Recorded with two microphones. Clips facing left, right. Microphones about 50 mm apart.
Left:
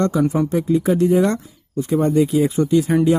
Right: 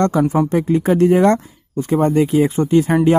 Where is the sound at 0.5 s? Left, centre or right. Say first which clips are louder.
Right 2 dB; right.